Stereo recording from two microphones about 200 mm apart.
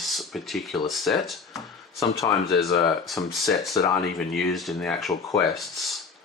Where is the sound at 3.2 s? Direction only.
15° left (ahead or behind).